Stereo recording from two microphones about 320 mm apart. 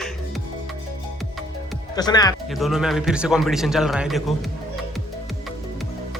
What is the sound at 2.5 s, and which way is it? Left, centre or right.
A man's voice, centre.